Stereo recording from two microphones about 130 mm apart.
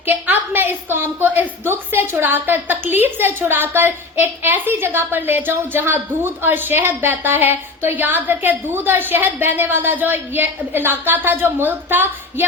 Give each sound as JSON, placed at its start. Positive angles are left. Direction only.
{"t": 0.0, "sound": "a woman's voice", "side_deg": -15}